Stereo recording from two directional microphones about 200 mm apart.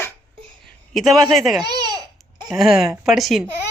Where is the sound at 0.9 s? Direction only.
Centre (ahead or behind).